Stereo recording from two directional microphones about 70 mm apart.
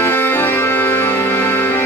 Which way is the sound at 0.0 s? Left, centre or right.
Left.